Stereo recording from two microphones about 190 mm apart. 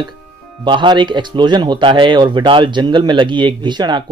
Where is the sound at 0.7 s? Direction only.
25° right (ahead or behind).